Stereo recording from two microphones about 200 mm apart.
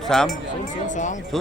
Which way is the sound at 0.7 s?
40° left (ahead or behind).